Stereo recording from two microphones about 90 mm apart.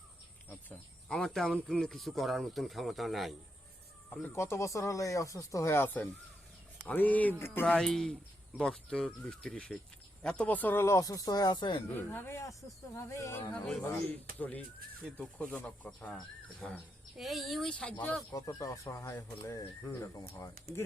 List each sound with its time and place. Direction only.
1.0 s speech: 5° left (ahead or behind)
4.3 s speech: 30° left (ahead or behind)
7.8 s speech: 5° left (ahead or behind); by 11.8 s 60° left (ahead or behind)
11.9 s speech: 25° left (ahead or behind)
13.5 s speech: 15° left (ahead or behind)
18.3 s speech: 40° left (ahead or behind)